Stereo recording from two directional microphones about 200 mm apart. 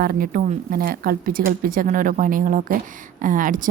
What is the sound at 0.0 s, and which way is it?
Speech, 45° right (ahead or behind).